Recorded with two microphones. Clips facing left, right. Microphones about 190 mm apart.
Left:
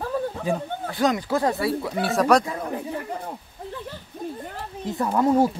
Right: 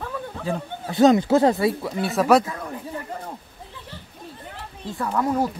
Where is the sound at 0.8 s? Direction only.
25° right (ahead or behind).